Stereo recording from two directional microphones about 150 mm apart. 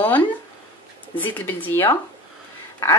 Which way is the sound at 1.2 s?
15° left (ahead or behind).